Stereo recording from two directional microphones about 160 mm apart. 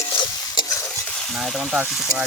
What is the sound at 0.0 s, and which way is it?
Stir, 30° left (ahead or behind).